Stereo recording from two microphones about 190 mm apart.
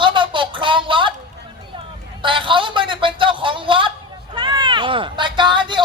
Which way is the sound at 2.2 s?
25° right (ahead or behind).